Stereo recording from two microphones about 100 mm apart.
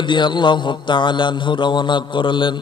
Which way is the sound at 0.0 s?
55° left (ahead or behind).